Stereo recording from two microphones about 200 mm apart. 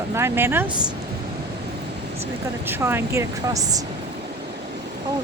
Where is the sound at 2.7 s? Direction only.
10° right (ahead or behind).